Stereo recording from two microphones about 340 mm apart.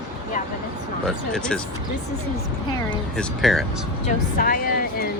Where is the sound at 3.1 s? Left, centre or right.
Centre.